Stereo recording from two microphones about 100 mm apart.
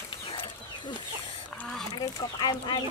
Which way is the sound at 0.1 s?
55° left (ahead or behind).